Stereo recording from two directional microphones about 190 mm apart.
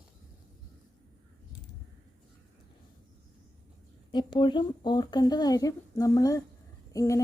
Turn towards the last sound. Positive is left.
turn(degrees=15)  # may be behind; listen again after turning